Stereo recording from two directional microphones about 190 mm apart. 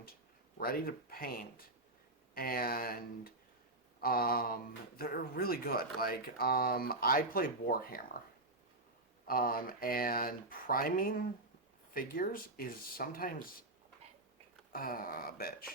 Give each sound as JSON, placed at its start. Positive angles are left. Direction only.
{"t": 0.6, "sound": "speech", "side_deg": 50}
{"t": 9.2, "sound": "speech", "side_deg": 50}
{"t": 14.7, "sound": "speech", "side_deg": 50}